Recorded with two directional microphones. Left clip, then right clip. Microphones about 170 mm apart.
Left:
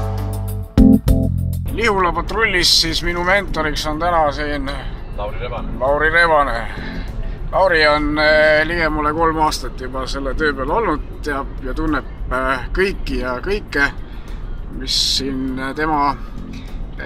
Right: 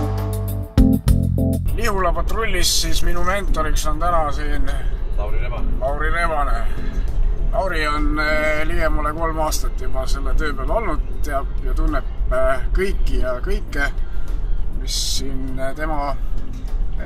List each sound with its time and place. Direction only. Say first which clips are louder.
0.0 s music: right 1 dB; centre (ahead or behind)
1.7 s speech: left 7 dB; 5° left (ahead or behind); by 4.7 s 35° left (ahead or behind)
5.9 s speech: left 8 dB; 50° left (ahead or behind); by 9.0 s 25° left (ahead or behind)
9.1 s speech: left 6 dB; 5° left (ahead or behind)